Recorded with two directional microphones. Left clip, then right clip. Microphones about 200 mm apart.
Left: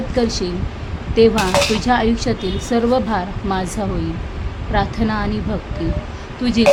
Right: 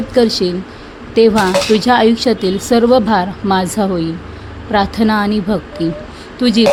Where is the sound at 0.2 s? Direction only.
25° right (ahead or behind).